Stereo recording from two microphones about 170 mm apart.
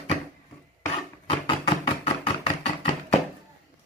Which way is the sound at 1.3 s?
30° left (ahead or behind).